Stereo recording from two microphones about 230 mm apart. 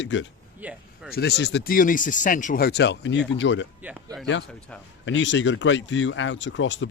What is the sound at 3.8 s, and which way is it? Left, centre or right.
Speech, centre.